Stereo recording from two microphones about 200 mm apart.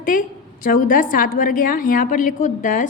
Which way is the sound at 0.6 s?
45° left (ahead or behind).